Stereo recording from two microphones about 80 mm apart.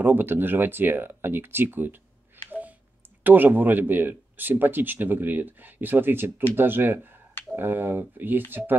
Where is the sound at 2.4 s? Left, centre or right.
Right.